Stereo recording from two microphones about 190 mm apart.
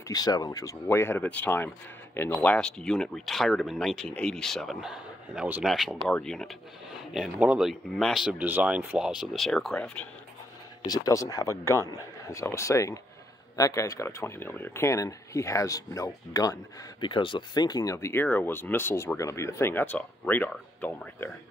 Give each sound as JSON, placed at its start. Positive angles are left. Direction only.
{"t": 0.1, "sound": "speech", "side_deg": 20}
{"t": 10.9, "sound": "speech", "side_deg": 20}